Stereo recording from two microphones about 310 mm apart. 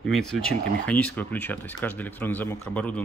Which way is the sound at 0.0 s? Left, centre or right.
Centre.